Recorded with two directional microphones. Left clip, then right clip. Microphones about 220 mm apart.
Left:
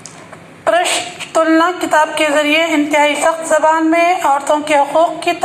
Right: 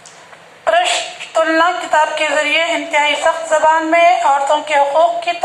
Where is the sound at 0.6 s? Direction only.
40° left (ahead or behind).